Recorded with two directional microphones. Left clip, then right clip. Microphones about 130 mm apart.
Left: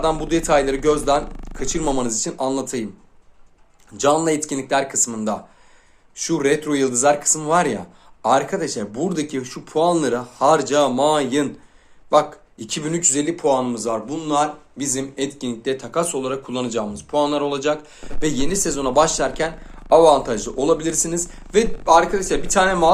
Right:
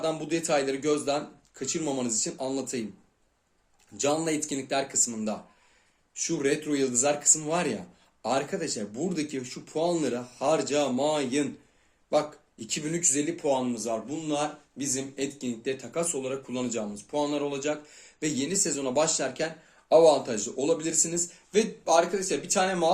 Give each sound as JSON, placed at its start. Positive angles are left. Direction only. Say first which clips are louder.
{"t": 0.0, "sound": "speech", "louder": "left 9 dB", "side_deg": -20}
{"t": 3.9, "sound": "speech", "louder": "left 10 dB", "side_deg": -20}